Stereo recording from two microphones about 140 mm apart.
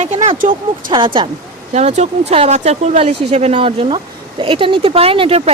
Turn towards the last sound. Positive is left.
turn(degrees=-45)  # may be behind; listen again after turning